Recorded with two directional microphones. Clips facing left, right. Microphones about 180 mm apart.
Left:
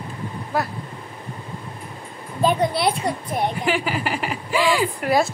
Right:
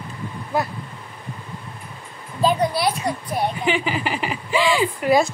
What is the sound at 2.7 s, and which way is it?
Speech, 30° left (ahead or behind).